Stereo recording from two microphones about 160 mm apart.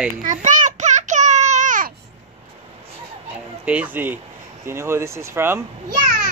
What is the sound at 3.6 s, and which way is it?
Speech, 10° right (ahead or behind).